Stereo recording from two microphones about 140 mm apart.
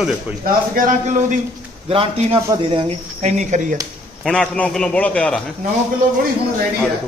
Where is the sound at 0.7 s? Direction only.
65° right (ahead or behind).